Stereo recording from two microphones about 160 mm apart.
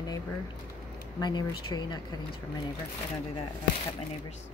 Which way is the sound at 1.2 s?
25° left (ahead or behind).